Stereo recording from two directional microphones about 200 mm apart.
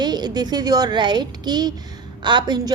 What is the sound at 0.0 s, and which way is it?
A woman's voice, 20° right (ahead or behind).